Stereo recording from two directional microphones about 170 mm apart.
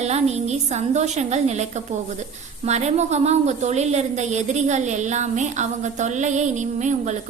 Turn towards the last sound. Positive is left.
turn(degrees=-45)  # may be behind; listen again after turning